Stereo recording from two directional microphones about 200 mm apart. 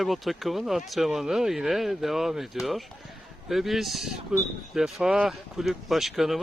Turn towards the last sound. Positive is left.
turn(degrees=0)  # may be behind; listen again after turning